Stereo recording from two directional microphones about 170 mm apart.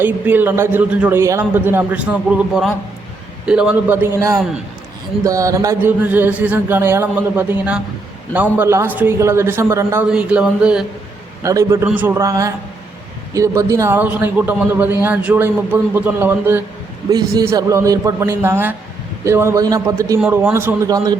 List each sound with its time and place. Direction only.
0.0 s a man's voice: 10° right (ahead or behind)
11.4 s a man's voice: 15° right (ahead or behind)
17.1 s a man's voice: 20° right (ahead or behind)